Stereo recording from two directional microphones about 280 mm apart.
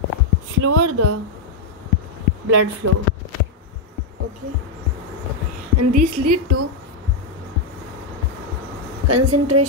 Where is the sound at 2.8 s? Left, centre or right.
Right.